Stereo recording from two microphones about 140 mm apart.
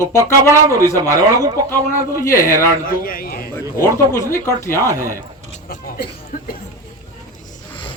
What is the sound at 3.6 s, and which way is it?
Speech, 20° right (ahead or behind).